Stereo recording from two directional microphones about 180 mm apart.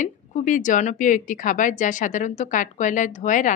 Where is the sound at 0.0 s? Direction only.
45° left (ahead or behind).